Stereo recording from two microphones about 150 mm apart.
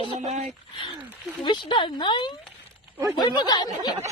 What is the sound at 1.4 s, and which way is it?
Snicker, 30° left (ahead or behind).